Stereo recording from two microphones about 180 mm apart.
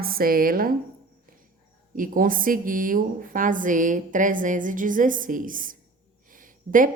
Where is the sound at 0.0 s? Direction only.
55° right (ahead or behind).